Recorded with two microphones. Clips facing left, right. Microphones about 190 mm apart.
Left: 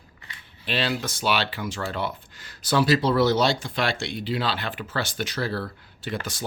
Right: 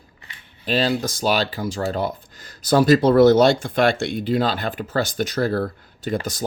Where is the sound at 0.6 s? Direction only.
40° right (ahead or behind).